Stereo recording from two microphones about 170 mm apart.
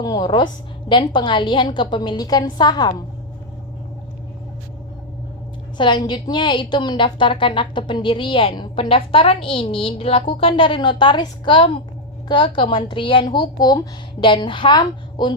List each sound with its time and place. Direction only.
0.0 s a woman's voice: 25° left (ahead or behind)
5.7 s a woman's voice: 25° left (ahead or behind)